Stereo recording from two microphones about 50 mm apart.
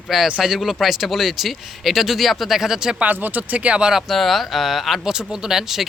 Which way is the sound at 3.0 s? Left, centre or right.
Right.